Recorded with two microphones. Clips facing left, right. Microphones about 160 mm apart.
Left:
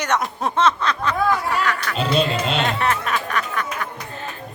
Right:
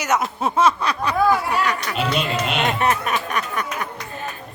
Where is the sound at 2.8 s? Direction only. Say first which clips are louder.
Right 1 dB; 20° right (ahead or behind).